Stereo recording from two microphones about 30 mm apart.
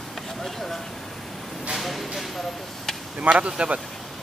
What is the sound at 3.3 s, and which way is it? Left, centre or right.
Speech, right.